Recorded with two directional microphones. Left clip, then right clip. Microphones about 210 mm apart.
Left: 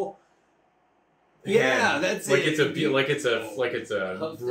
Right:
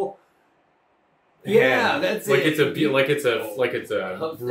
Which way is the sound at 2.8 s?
20° right (ahead or behind).